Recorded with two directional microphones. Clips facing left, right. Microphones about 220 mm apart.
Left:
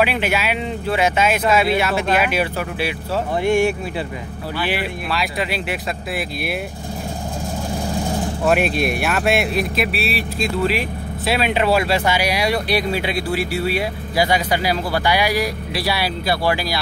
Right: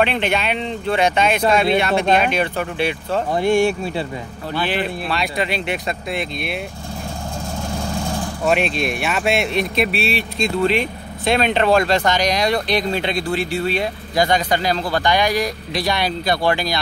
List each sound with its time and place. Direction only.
0.0 s speech: 5° left (ahead or behind)
3.3 s speech: 30° right (ahead or behind)
4.6 s speech: 5° left (ahead or behind)
7.8 s vehicle: 20° left (ahead or behind)
8.5 s speech: 5° left (ahead or behind)